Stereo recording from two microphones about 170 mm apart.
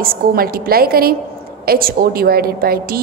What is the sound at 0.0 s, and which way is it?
A woman's voice, 60° right (ahead or behind).